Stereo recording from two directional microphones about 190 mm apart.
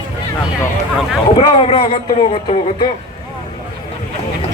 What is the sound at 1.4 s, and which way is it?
Speech, 25° left (ahead or behind).